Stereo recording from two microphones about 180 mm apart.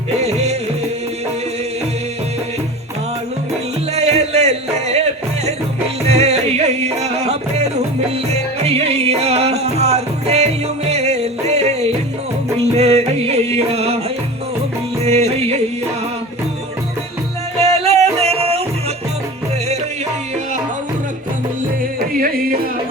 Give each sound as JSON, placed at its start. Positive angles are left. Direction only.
{"t": 0.2, "sound": "music", "side_deg": -35}
{"t": 3.9, "sound": "music", "side_deg": -35}
{"t": 6.1, "sound": "music", "side_deg": -35}
{"t": 15.0, "sound": "music", "side_deg": -35}
{"t": 17.6, "sound": "music", "side_deg": -35}